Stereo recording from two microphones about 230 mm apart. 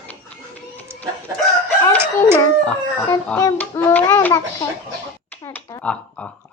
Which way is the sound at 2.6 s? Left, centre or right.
Centre.